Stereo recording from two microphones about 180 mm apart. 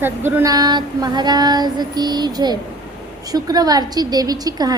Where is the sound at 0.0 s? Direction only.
10° right (ahead or behind).